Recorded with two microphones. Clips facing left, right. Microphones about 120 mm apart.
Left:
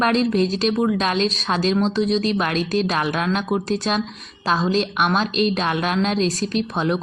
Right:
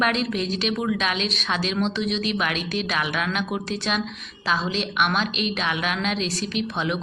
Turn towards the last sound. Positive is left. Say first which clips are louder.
# left 4 dB
turn(degrees=40)  # may be behind; listen again after turning